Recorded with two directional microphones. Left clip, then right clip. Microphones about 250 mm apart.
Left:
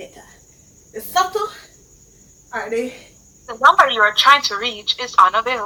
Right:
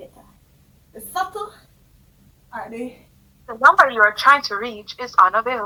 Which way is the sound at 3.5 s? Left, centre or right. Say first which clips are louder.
Left 1 dB; centre.